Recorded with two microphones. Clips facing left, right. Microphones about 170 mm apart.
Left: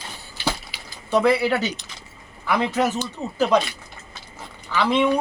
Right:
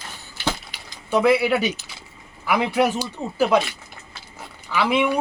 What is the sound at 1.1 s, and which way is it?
Speech, 5° right (ahead or behind).